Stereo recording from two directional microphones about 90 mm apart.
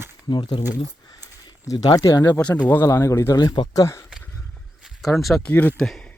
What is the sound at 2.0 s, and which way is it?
Speech, 35° left (ahead or behind).